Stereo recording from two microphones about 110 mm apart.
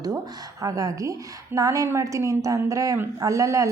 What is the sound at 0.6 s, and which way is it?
A woman's voice, 30° right (ahead or behind).